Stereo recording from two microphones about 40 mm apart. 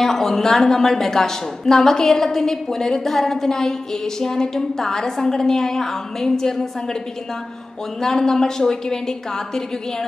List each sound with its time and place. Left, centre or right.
0.0 s a woman's voice: centre
8.0 s a woman's voice: centre